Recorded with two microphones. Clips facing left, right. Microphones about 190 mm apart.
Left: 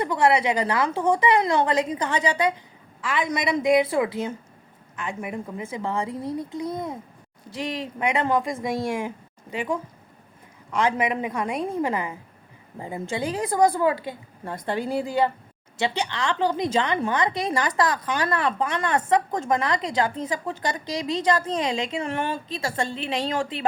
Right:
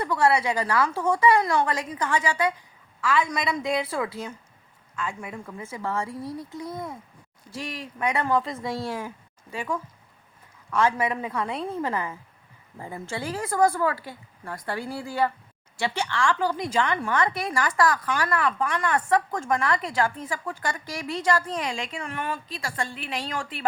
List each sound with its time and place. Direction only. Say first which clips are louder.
0.0 s a woman's voice: left 2 dB; 20° left (ahead or behind)